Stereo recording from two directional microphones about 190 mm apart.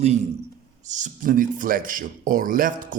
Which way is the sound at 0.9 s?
40° right (ahead or behind).